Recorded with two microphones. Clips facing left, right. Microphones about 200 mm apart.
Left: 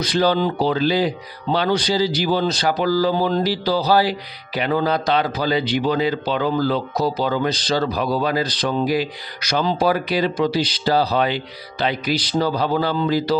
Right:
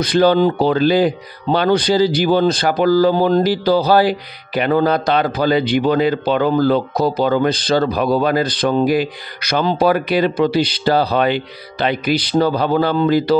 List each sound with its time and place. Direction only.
0.0 s speech: 55° right (ahead or behind)